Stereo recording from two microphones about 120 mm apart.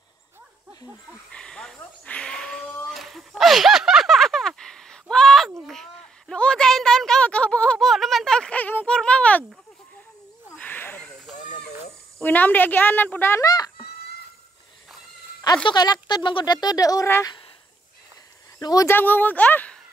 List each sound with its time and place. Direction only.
1.3 s a sound: 5° left (ahead or behind)
10.5 s snake: 15° left (ahead or behind)
11.3 s a sound: 90° left
12.2 s a woman's voice: 15° left (ahead or behind)
15.6 s speech: 35° left (ahead or behind)
18.6 s speech: 30° left (ahead or behind)
18.9 s a woman's voice: 15° left (ahead or behind)